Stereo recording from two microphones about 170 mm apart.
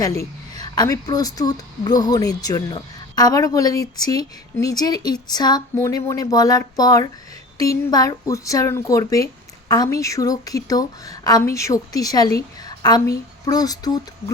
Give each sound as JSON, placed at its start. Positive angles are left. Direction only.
{"t": 0.6, "sound": "speech", "side_deg": 25}